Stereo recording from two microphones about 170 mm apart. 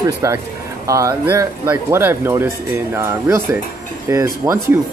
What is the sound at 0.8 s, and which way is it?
Speech, 20° right (ahead or behind).